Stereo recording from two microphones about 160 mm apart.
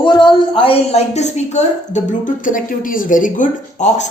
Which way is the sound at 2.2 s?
55° left (ahead or behind).